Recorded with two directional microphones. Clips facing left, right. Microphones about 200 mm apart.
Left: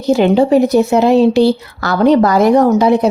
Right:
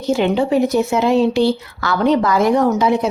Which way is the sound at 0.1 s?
40° left (ahead or behind).